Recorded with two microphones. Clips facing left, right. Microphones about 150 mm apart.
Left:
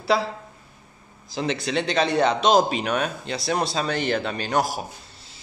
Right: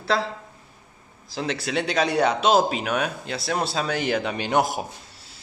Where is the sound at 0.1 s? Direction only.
5° left (ahead or behind).